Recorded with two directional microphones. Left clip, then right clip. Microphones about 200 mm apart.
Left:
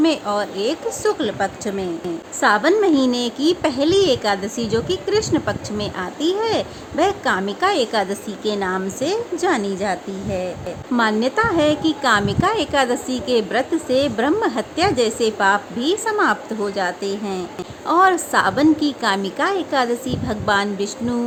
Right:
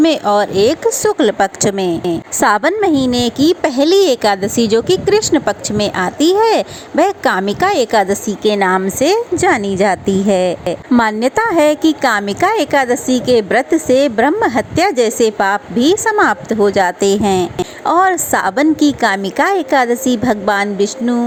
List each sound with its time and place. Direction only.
0.0 s speech: 30° right (ahead or behind)